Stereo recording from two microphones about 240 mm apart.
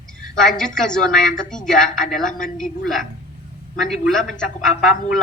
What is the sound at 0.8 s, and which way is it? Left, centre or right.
A man's voice, centre.